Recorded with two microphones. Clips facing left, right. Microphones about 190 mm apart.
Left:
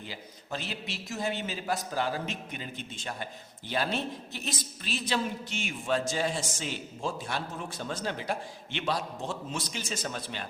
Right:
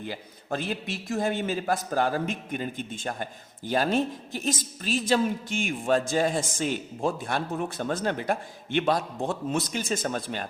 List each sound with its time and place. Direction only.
0.0 s a man's voice: 50° right (ahead or behind)